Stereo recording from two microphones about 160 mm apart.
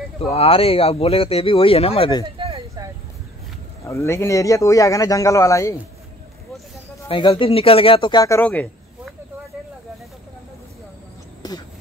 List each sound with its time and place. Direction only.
0.2 s speech: 40° left (ahead or behind)
2.3 s a sound: 40° right (ahead or behind)
3.8 s a man's voice: 20° left (ahead or behind)
7.1 s speech: 30° left (ahead or behind)
8.4 s speech: 10° left (ahead or behind)
11.4 s speech: 25° left (ahead or behind)